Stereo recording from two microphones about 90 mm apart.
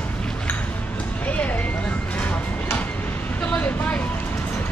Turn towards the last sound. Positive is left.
turn(degrees=15)  # may be behind; listen again after turning